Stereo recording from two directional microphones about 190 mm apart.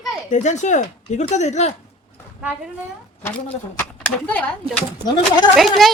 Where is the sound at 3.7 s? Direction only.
5° left (ahead or behind).